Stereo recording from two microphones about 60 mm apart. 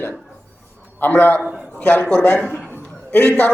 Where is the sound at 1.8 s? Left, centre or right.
Left.